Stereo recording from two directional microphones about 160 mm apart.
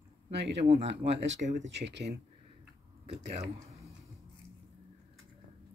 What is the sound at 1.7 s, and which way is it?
Speech, 90° right.